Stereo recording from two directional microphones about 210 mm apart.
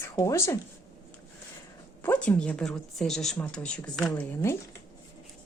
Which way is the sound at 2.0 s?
5° left (ahead or behind).